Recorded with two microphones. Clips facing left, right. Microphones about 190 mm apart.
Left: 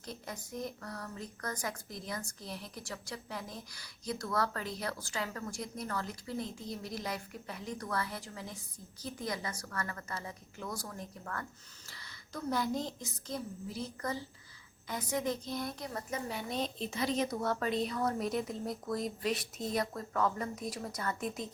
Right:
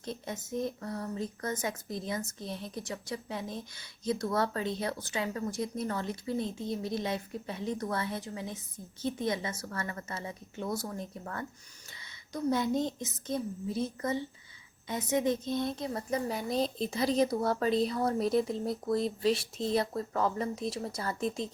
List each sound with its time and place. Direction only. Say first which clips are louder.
0.0 s a woman's voice: right 6 dB; 25° right (ahead or behind)